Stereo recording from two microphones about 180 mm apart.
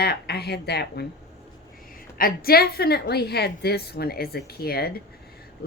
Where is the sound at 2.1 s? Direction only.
55° left (ahead or behind).